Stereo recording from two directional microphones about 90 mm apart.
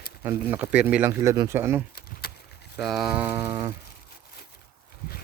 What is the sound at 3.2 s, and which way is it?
Speech, 25° right (ahead or behind).